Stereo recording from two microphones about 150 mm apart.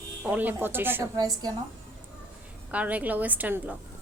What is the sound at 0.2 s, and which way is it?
Speech, 10° right (ahead or behind).